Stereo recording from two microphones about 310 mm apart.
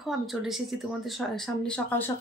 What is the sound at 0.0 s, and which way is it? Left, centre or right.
Speech, centre.